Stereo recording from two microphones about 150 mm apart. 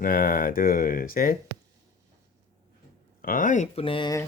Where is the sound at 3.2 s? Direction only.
65° left (ahead or behind).